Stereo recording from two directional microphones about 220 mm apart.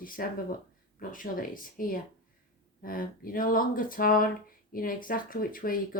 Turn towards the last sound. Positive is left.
turn(degrees=40)  # may be behind; listen again after turning